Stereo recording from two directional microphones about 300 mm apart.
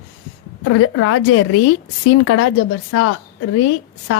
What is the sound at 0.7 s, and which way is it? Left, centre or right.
A woman's voice, left.